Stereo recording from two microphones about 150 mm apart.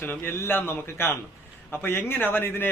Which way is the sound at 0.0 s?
15° left (ahead or behind).